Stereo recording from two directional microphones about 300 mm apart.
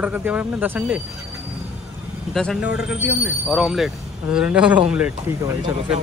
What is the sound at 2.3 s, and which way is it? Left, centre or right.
Speech, centre.